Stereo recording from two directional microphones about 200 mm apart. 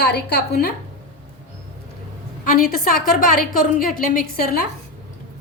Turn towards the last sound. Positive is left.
turn(degrees=45)  # may be behind; listen again after turning